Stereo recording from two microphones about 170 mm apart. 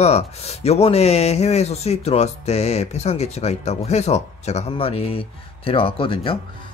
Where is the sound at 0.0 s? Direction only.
40° left (ahead or behind).